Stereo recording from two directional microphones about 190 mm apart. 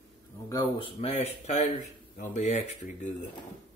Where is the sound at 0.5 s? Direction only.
25° left (ahead or behind); by 3.3 s 40° left (ahead or behind).